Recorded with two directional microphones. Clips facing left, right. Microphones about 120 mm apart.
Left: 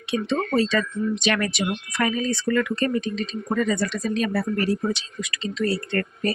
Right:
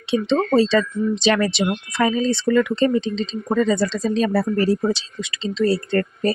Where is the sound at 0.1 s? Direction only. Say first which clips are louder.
Right 5 dB; 30° right (ahead or behind).